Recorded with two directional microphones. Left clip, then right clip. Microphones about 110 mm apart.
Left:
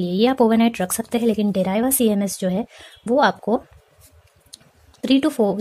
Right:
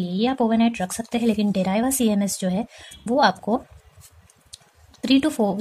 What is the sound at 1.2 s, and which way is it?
Speech, 20° left (ahead or behind).